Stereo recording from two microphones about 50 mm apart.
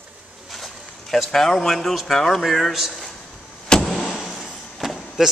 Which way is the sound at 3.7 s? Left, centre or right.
Centre.